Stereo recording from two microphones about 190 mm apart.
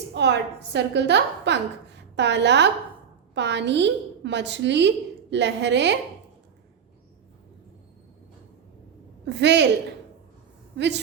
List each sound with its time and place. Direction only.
0.1 s a woman's voice: 65° right (ahead or behind)
9.2 s a woman's voice: 65° right (ahead or behind)
10.8 s a woman's voice: 65° right (ahead or behind)